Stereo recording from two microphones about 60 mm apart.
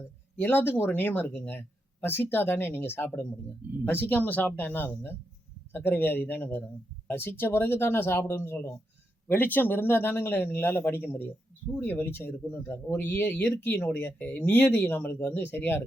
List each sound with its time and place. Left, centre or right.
0.3 s speech: left